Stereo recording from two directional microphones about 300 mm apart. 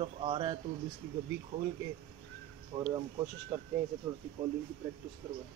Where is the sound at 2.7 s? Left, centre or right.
Right.